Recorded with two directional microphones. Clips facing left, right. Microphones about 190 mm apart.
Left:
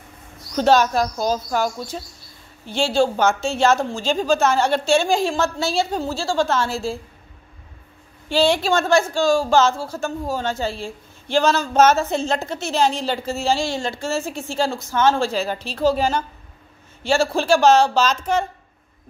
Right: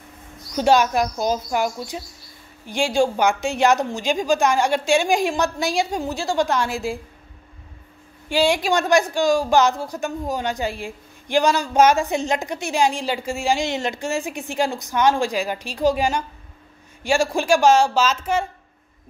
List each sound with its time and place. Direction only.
0.6 s speech: 15° right (ahead or behind)
8.3 s speech: 10° right (ahead or behind)